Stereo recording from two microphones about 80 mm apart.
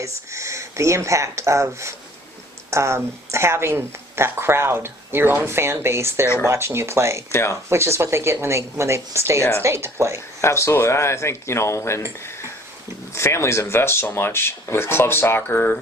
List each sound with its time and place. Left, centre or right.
0.0 s speech: right
7.3 s speech: left
7.7 s speech: right
10.4 s speech: left
13.1 s speech: left